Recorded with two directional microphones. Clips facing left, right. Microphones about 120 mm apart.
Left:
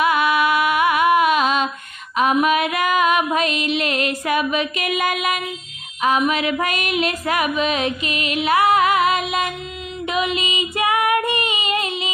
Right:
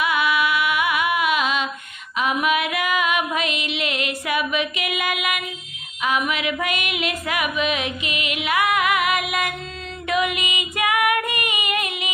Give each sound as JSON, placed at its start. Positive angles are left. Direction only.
{"t": 0.0, "sound": "music", "side_deg": 40}
{"t": 2.1, "sound": "female singing", "side_deg": 40}